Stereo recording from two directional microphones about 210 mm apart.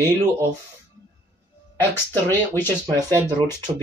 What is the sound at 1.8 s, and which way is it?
Speech, 10° left (ahead or behind).